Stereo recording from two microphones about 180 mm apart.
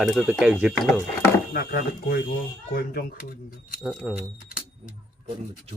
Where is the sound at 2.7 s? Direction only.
55° left (ahead or behind).